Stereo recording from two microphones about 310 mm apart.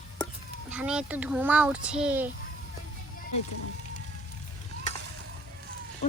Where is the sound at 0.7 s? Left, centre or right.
Centre.